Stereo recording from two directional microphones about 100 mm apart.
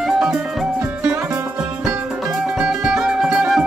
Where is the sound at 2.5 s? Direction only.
5° right (ahead or behind).